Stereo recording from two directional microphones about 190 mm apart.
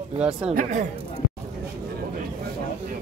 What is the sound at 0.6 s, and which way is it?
Speech, 40° right (ahead or behind).